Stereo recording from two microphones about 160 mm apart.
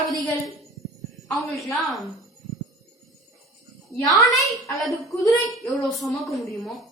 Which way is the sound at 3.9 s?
20° left (ahead or behind).